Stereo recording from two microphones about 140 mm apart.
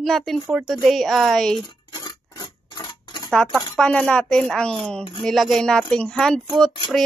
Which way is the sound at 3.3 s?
Centre (ahead or behind).